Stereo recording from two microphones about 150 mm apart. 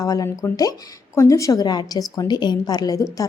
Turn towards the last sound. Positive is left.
turn(degrees=20)  # may be behind; listen again after turning